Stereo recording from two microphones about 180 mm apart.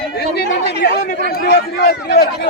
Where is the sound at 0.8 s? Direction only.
65° left (ahead or behind).